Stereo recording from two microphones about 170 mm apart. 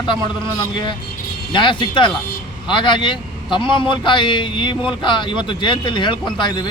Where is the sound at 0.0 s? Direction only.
30° left (ahead or behind).